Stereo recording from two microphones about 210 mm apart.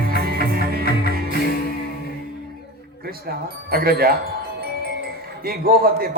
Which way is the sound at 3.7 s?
45° right (ahead or behind).